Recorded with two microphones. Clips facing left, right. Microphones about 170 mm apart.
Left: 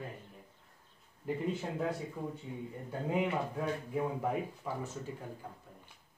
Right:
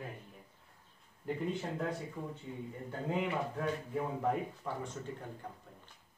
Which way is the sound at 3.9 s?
5° left (ahead or behind).